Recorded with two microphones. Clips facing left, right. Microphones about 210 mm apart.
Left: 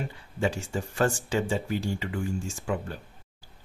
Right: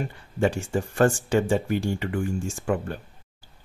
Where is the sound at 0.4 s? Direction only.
50° right (ahead or behind).